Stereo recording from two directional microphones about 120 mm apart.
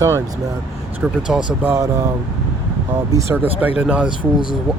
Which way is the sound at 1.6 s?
20° right (ahead or behind).